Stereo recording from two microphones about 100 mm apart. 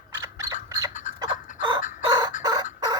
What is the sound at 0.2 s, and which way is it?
Fowl, 35° right (ahead or behind).